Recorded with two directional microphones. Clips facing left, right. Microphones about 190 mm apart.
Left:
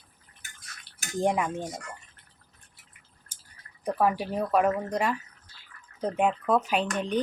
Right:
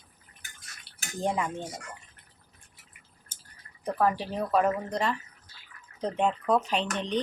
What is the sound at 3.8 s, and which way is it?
Speech, 10° left (ahead or behind).